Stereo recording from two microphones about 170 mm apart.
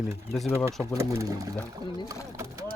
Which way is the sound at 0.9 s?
15° right (ahead or behind).